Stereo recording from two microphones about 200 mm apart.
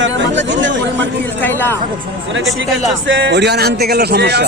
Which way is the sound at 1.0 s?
10° left (ahead or behind).